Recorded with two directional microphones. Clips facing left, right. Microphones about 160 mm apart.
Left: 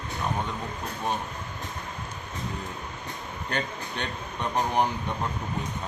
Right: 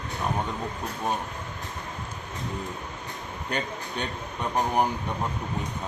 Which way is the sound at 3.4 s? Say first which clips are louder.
Even; 10° right (ahead or behind).